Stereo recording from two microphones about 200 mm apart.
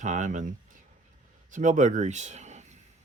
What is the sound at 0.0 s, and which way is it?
Speech, 35° right (ahead or behind).